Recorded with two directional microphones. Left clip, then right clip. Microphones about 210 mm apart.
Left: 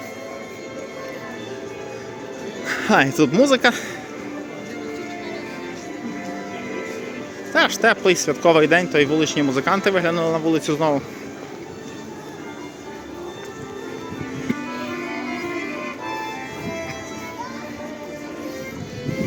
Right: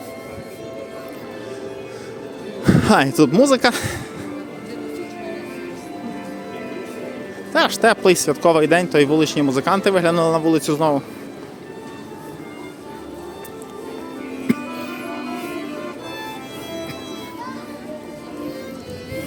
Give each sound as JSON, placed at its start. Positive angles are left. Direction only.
{"t": 2.6, "sound": "speech", "side_deg": -25}
{"t": 7.5, "sound": "speech", "side_deg": -15}